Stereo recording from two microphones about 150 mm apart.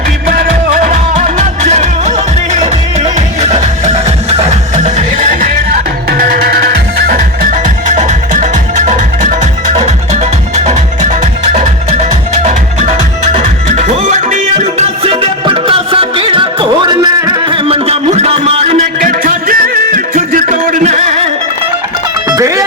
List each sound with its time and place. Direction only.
0.3 s music: 60° right (ahead or behind)
6.1 s music: 80° right
7.1 s music: 55° right (ahead or behind); by 18.1 s 40° right (ahead or behind)
18.1 s a sound: 45° right (ahead or behind)
18.9 s music: 65° right (ahead or behind)
22.3 s music: 20° right (ahead or behind)